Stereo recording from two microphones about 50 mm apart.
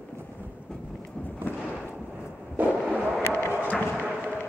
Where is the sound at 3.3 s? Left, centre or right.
Left.